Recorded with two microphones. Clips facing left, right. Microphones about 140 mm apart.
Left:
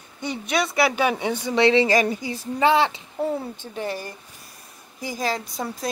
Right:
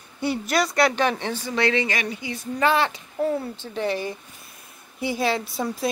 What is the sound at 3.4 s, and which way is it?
Speech, 10° left (ahead or behind).